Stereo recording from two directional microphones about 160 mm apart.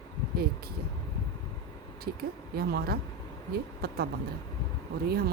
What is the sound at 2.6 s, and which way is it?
Speech, 75° right (ahead or behind).